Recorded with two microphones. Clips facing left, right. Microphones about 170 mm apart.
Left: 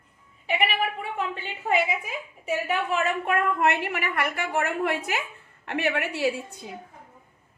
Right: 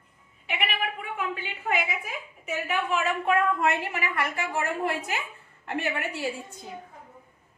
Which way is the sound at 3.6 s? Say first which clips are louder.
Left 2 dB; 65° left (ahead or behind).